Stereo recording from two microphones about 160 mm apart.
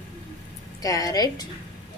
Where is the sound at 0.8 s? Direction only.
20° left (ahead or behind).